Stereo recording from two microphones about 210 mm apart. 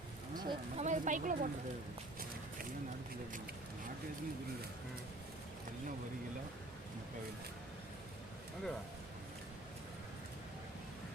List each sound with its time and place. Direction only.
0.4 s speech: 35° right (ahead or behind)